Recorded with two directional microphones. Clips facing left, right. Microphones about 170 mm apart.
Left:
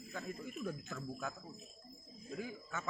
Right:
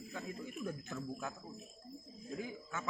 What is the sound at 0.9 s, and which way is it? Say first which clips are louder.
Speech: right 1 dB; 15° right (ahead or behind).